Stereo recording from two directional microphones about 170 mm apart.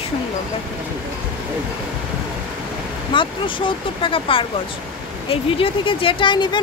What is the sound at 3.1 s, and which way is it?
Speech, 30° left (ahead or behind).